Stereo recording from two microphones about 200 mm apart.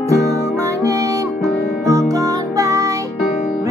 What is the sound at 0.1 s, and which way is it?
Music, 15° right (ahead or behind).